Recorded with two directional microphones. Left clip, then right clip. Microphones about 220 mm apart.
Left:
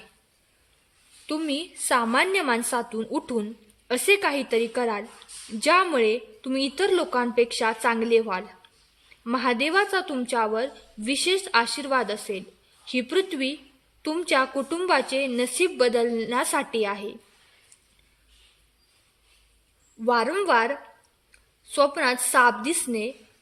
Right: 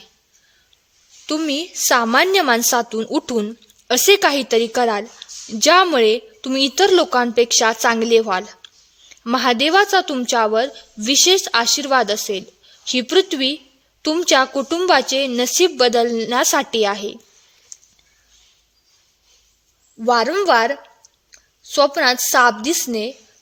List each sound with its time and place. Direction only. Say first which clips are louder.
1.3 s a woman's voice: right 7 dB; 45° right (ahead or behind)
20.0 s a woman's voice: right 7 dB; 40° right (ahead or behind)